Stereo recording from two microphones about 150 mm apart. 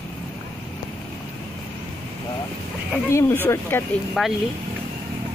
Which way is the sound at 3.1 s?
20° left (ahead or behind).